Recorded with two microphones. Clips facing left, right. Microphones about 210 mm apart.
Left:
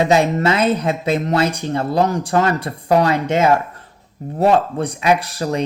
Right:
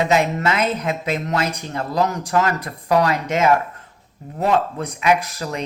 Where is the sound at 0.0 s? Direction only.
30° left (ahead or behind).